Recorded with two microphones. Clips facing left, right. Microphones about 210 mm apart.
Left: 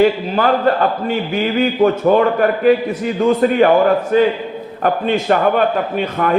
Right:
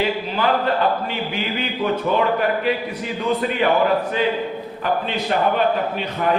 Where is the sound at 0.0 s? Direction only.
45° left (ahead or behind).